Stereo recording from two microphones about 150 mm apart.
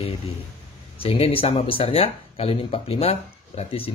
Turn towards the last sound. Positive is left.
turn(degrees=40)  # may be behind; listen again after turning